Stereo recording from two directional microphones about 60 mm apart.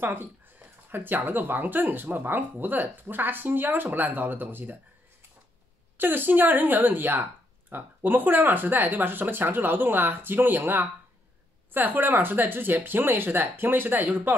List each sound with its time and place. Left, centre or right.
0.0 s speech: right
5.9 s speech: right